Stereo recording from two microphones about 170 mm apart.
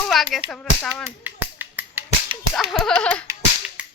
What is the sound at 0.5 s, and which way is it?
Speech, 5° left (ahead or behind).